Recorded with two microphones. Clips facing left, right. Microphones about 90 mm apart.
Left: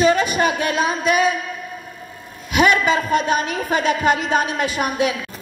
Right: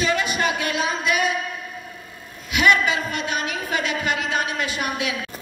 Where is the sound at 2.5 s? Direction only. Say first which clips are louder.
Left 3 dB; 45° left (ahead or behind).